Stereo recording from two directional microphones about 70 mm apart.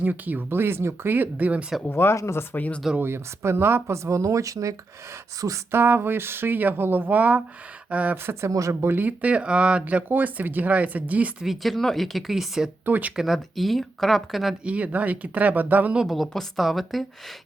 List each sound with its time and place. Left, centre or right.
0.0 s speech: right
1.9 s speech: left
2.5 s speech: left
3.0 s speech: right
5.7 s speech: right
8.1 s speech: right
8.9 s speech: right
9.8 s speech: right
11.4 s speech: centre
12.8 s speech: right
13.1 s speech: centre
14.6 s speech: centre
16.0 s speech: centre